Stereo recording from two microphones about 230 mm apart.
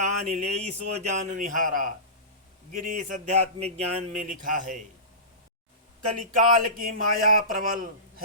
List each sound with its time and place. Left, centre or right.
0.0 s speech: right
6.1 s speech: right